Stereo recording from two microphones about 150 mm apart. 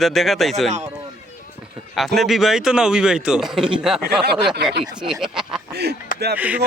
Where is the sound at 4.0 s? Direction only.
90° right.